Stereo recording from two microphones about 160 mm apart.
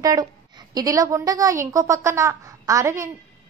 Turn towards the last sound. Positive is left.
turn(degrees=-20)  # may be behind; listen again after turning